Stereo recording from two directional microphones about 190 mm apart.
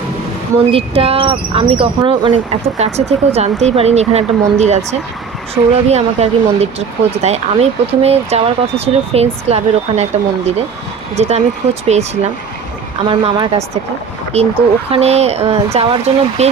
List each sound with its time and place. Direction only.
0.7 s speech: 30° right (ahead or behind)
13.1 s a woman's voice: 25° right (ahead or behind)